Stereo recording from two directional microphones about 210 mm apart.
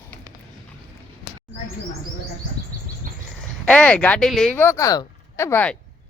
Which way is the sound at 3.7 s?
5° left (ahead or behind).